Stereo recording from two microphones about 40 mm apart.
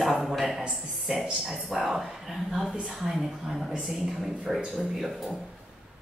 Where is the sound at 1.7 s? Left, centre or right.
Centre.